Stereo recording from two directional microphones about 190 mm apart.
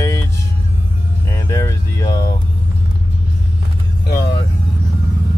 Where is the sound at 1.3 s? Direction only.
15° left (ahead or behind).